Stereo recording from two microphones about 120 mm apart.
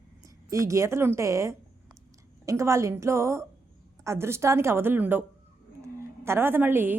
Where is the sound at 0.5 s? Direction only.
25° right (ahead or behind).